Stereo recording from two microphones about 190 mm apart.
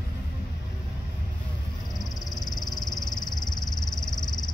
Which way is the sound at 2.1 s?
20° left (ahead or behind).